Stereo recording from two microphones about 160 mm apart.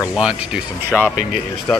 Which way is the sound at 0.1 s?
5° right (ahead or behind).